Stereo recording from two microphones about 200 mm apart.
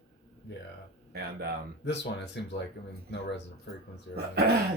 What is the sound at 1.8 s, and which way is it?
Speech, 60° left (ahead or behind).